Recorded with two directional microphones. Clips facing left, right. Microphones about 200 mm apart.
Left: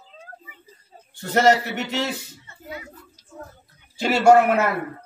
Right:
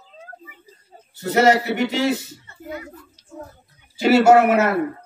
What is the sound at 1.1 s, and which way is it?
Speech, 5° right (ahead or behind).